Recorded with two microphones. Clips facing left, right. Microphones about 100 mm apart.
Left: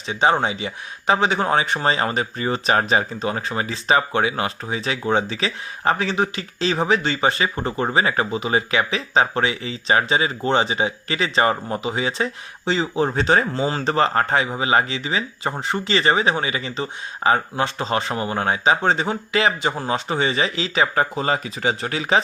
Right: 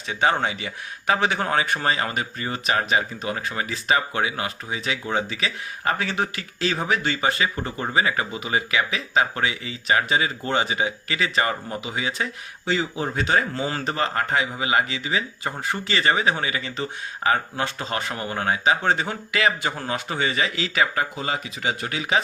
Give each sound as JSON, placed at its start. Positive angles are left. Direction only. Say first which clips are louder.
{"t": 0.1, "sound": "speech", "louder": "left 3 dB", "side_deg": 20}